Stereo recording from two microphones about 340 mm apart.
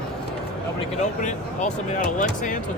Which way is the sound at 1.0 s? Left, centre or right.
Left.